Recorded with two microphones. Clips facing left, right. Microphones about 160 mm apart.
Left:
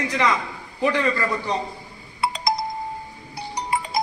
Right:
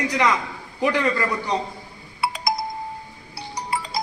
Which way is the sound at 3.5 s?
20° left (ahead or behind).